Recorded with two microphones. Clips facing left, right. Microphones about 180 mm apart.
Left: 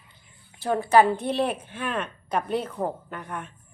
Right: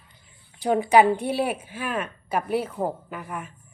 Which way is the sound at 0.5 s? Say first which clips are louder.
Right 1 dB; 15° right (ahead or behind).